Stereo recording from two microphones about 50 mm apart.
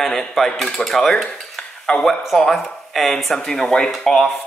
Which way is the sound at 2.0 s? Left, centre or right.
Centre.